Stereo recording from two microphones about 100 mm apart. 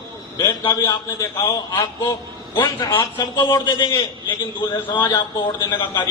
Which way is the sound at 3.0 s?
50° left (ahead or behind).